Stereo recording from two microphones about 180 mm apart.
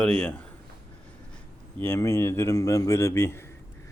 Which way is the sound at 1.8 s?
15° left (ahead or behind).